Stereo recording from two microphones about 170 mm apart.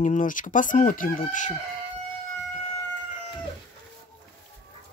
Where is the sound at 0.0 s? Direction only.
50° left (ahead or behind).